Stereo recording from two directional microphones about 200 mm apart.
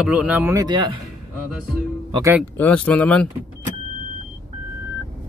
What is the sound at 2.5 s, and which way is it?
Speech, 10° left (ahead or behind).